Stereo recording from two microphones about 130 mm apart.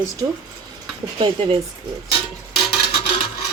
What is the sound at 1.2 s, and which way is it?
Speech, 40° right (ahead or behind).